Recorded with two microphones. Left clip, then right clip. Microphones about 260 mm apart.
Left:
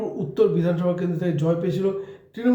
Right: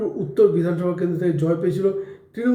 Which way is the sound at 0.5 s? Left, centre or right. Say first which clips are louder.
Right 1 dB; centre.